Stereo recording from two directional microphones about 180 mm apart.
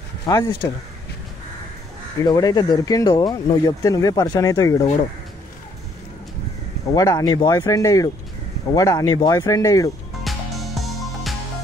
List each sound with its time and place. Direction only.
0.3 s speech: 15° left (ahead or behind)
2.1 s speech: 20° left (ahead or behind)
6.9 s speech: 20° left (ahead or behind)
10.2 s music: centre (ahead or behind)